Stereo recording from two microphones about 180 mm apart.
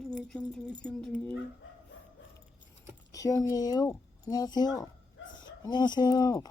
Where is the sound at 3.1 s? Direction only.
20° left (ahead or behind).